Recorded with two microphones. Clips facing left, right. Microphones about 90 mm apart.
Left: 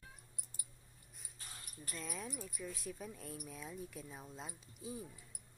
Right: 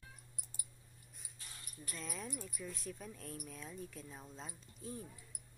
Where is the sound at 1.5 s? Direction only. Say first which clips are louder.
Left 1 dB; 35° left (ahead or behind).